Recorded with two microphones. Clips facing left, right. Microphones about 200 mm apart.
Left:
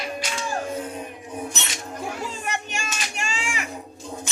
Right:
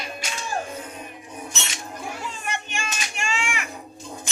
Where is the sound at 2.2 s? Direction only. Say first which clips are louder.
Left 2 dB; 40° left (ahead or behind).